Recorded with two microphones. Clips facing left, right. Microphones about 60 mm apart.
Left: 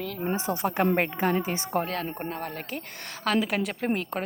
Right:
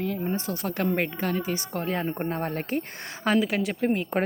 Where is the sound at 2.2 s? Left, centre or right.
Right.